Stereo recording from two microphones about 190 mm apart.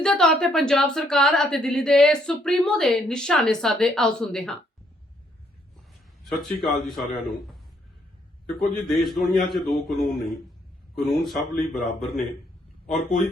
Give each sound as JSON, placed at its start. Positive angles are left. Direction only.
{"t": 0.0, "sound": "a woman's voice", "side_deg": 5}
{"t": 6.2, "sound": "a woman's voice", "side_deg": 0}
{"t": 9.0, "sound": "a woman's voice", "side_deg": 0}